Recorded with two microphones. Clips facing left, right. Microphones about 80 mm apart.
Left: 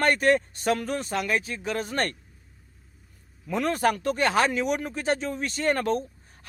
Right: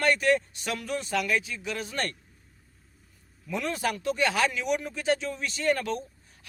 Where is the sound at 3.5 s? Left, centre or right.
Left.